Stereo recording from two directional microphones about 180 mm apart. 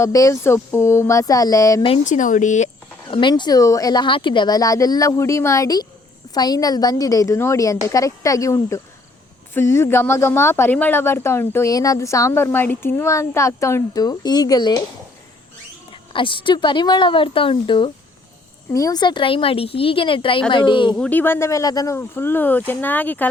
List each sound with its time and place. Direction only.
0.0 s speech: 15° left (ahead or behind)
2.0 s speech: 45° left (ahead or behind)
3.1 s speech: 25° left (ahead or behind)
15.9 s speech: 30° left (ahead or behind)
20.9 s speech: 5° left (ahead or behind)